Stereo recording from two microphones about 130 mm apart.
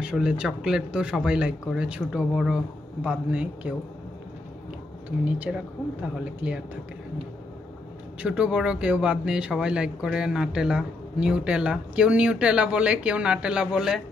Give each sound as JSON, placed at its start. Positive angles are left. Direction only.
{"t": 0.0, "sound": "speech", "side_deg": -5}
{"t": 5.2, "sound": "speech", "side_deg": -10}
{"t": 8.2, "sound": "speech", "side_deg": -10}